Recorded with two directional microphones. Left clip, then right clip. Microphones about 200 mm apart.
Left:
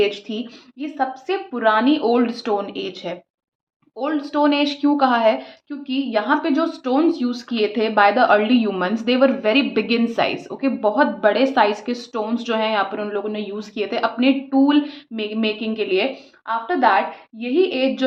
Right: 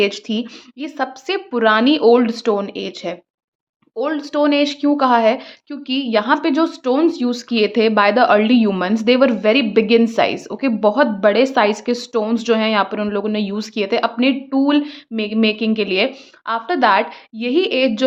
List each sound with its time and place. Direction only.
0.0 s a woman's voice: 40° right (ahead or behind)